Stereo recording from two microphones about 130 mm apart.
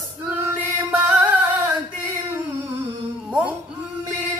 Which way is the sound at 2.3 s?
15° right (ahead or behind).